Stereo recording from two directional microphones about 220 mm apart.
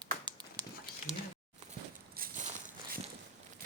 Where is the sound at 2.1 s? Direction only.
40° right (ahead or behind).